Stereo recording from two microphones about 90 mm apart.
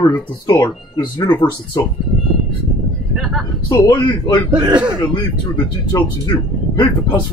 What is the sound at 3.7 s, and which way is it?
Speech, 55° left (ahead or behind).